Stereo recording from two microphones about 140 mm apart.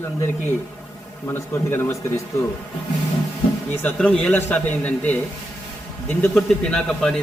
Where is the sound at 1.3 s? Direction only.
20° left (ahead or behind).